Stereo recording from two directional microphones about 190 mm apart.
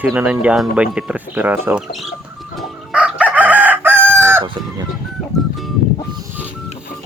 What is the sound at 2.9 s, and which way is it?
Chicken, 5° right (ahead or behind).